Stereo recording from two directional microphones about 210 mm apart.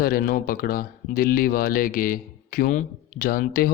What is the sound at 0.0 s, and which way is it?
Speech, 45° left (ahead or behind).